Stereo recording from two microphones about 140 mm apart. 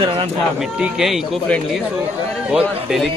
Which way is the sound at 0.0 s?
35° right (ahead or behind).